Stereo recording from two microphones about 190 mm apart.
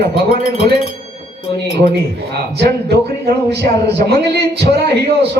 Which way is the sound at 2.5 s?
60° right (ahead or behind).